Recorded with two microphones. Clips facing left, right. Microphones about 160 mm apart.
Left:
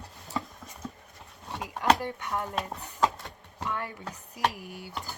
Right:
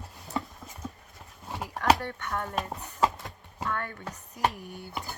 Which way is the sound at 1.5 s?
5° right (ahead or behind).